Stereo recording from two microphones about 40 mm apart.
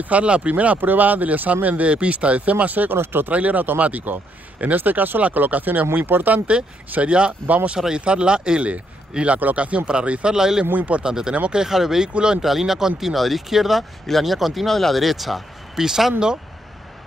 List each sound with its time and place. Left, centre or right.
0.0 s speech: right
0.7 s speech: right
2.5 s speech: right
2.9 s speech: right
3.3 s speech: right
6.0 s speech: right
6.3 s speech: right
7.4 s speech: right
8.0 s speech: right
10.3 s speech: centre
10.7 s speech: right
11.0 s speech: centre
12.1 s speech: right
12.4 s speech: centre